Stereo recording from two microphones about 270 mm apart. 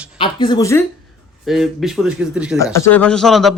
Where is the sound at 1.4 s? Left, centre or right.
Centre.